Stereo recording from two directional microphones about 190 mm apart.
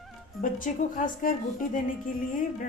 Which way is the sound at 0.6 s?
45° left (ahead or behind).